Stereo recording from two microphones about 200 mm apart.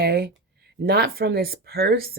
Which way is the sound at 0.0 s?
50° right (ahead or behind).